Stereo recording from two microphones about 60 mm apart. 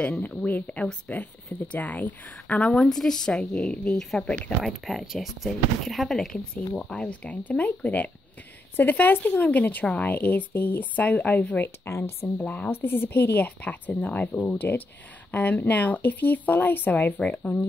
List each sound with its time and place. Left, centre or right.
0.5 s speech: left
2.6 s speech: centre
4.6 s speech: centre; by 11.7 s left
11.8 s a woman's voice: left